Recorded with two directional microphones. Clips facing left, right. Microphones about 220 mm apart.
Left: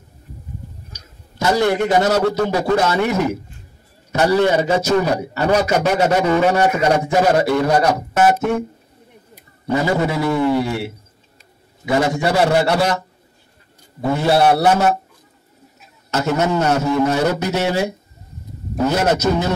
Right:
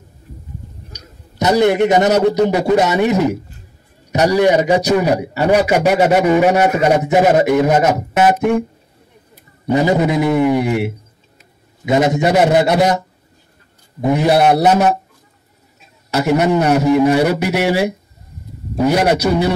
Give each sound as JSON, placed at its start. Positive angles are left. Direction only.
{"t": 1.4, "sound": "a man's voice", "side_deg": -20}
{"t": 9.7, "sound": "a man's voice", "side_deg": -20}
{"t": 14.0, "sound": "a man's voice", "side_deg": -15}
{"t": 16.1, "sound": "a man's voice", "side_deg": -15}